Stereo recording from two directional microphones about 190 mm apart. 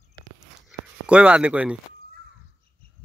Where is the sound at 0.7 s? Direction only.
5° right (ahead or behind).